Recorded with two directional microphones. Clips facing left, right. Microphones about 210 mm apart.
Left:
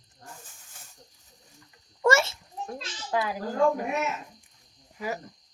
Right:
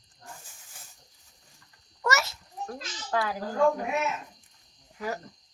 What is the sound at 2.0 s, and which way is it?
Speech, 30° left (ahead or behind).